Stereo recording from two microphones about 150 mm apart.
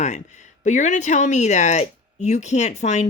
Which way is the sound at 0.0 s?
50° left (ahead or behind).